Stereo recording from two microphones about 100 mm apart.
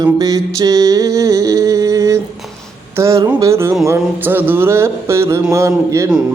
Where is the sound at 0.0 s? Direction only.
40° right (ahead or behind).